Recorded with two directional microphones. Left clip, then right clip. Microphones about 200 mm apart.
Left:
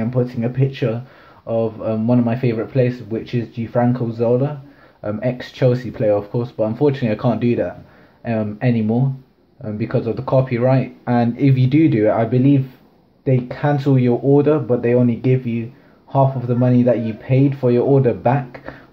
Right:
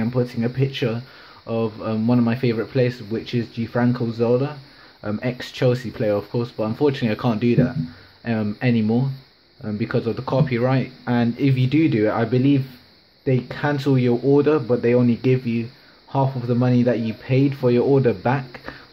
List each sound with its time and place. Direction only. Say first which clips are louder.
0.0 s speech: left 2 dB; 25° right (ahead or behind)